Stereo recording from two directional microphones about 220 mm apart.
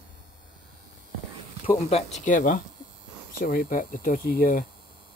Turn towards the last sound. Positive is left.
turn(degrees=45)  # may be behind; listen again after turning